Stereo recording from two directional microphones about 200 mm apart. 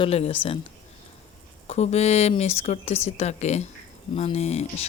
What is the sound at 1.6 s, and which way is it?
Speech, 35° left (ahead or behind).